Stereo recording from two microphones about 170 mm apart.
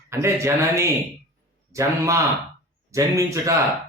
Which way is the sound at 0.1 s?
15° right (ahead or behind).